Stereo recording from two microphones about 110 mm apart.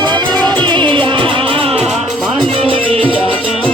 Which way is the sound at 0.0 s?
40° right (ahead or behind).